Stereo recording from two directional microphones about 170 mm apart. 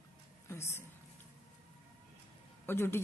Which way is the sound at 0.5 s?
15° left (ahead or behind).